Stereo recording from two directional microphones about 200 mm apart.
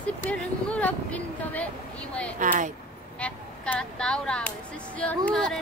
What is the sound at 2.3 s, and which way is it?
Speech, 40° right (ahead or behind).